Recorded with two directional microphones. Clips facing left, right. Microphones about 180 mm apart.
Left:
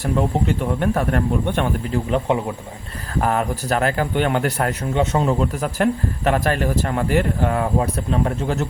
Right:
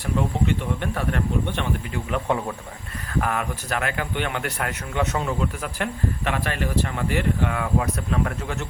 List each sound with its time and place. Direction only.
0.2 s speech: 40° left (ahead or behind)
1.9 s speech: 30° left (ahead or behind)
3.2 s speech: 35° left (ahead or behind)